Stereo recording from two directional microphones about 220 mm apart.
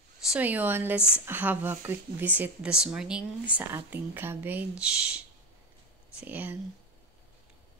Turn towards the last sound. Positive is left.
turn(degrees=-5)  # may be behind; listen again after turning